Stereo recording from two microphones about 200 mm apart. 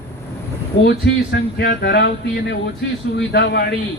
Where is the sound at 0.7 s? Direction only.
60° left (ahead or behind).